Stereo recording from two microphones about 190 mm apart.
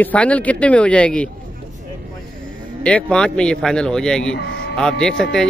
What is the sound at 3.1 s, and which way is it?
Speech, 5° left (ahead or behind).